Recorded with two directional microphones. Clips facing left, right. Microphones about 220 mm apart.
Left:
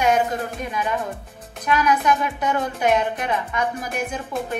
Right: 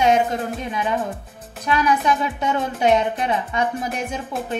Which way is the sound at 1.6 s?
30° right (ahead or behind).